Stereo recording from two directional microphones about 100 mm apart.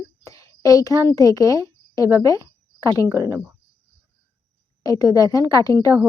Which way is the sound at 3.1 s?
30° right (ahead or behind).